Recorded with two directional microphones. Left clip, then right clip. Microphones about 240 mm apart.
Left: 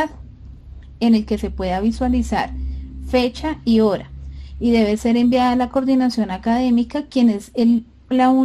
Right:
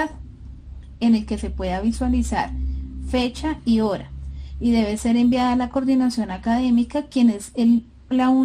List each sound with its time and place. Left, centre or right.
0.9 s a woman's voice: left